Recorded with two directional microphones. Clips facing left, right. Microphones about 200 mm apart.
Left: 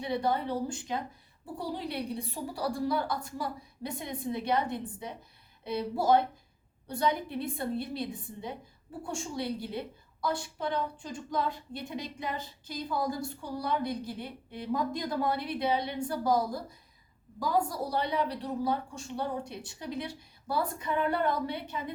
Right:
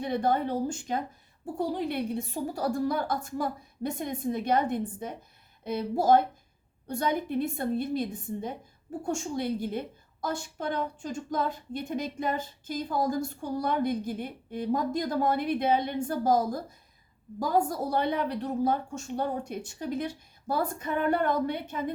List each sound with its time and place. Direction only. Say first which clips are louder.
0.0 s a woman's voice: right 3 dB; 50° right (ahead or behind)